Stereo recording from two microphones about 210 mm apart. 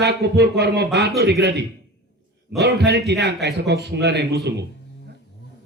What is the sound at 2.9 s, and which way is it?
A man's voice, 50° right (ahead or behind).